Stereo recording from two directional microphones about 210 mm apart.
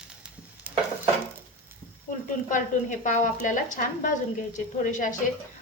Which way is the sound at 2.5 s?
35° left (ahead or behind).